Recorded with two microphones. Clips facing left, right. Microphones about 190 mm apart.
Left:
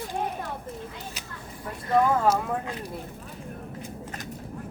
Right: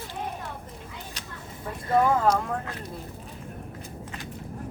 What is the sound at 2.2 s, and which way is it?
Speech, 5° left (ahead or behind).